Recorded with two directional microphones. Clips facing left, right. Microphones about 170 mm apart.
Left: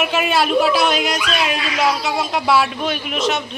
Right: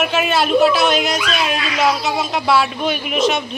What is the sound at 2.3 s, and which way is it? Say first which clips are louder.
A woman's voice: even; 5° left (ahead or behind).